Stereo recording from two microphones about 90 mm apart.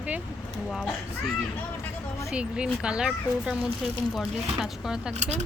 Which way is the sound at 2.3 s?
10° right (ahead or behind).